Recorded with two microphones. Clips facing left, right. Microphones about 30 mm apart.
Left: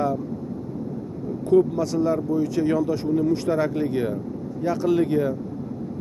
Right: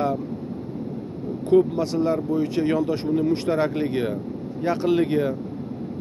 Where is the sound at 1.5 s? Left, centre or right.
Right.